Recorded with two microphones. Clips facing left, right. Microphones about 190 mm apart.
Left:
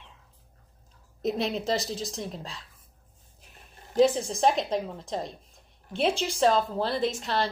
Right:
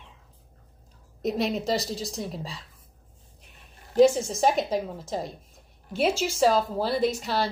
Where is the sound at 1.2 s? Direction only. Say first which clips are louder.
Right 2 dB; centre (ahead or behind).